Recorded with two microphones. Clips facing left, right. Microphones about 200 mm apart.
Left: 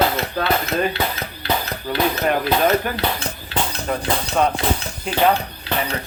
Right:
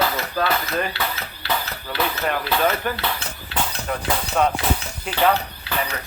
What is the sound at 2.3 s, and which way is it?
Speech, 45° left (ahead or behind).